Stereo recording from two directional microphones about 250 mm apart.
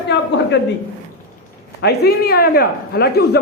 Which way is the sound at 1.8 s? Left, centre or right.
Left.